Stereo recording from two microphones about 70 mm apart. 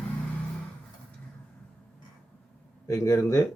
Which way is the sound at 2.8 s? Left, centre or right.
Left.